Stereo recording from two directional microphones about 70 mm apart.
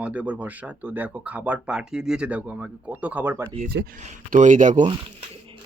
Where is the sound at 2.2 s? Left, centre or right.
Right.